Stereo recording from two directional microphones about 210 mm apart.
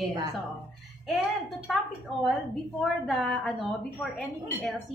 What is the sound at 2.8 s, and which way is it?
Speech, centre (ahead or behind).